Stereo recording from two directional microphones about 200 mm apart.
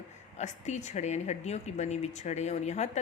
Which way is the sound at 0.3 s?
35° left (ahead or behind).